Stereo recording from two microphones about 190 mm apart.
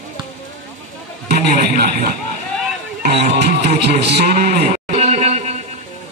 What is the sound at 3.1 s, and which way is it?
Music, 30° right (ahead or behind).